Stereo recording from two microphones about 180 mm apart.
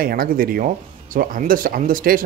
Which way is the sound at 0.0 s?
55° right (ahead or behind).